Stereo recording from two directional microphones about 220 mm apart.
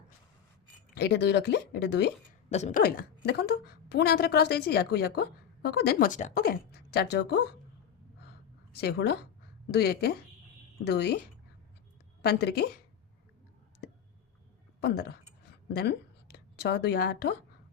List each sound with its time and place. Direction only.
0.9 s a woman's voice: 50° left (ahead or behind)
2.5 s speech: 30° left (ahead or behind)
2.8 s a woman's voice: 45° left (ahead or behind)
8.7 s a woman's voice: 50° left (ahead or behind)
12.2 s a woman's voice: 45° left (ahead or behind)
13.8 s a sound: 45° left (ahead or behind)
14.8 s a woman's voice: 45° left (ahead or behind)